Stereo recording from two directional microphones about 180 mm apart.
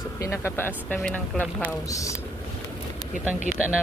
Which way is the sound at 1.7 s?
20° left (ahead or behind).